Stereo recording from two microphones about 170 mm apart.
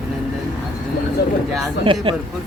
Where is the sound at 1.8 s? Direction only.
30° right (ahead or behind).